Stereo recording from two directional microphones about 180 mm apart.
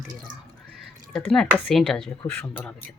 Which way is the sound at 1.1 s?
5° left (ahead or behind).